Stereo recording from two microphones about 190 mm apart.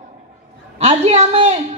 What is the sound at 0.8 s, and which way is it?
Speech, 35° right (ahead or behind).